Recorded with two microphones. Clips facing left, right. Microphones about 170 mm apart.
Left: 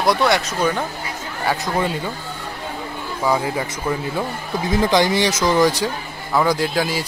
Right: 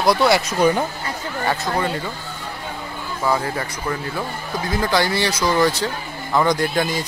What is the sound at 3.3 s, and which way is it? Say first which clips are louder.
Speech: left 1 dB; 10° left (ahead or behind).